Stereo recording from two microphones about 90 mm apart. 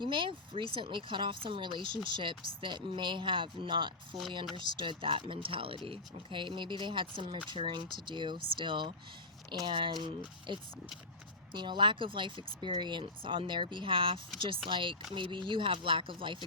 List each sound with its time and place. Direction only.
0.0 s speech: 70° right (ahead or behind)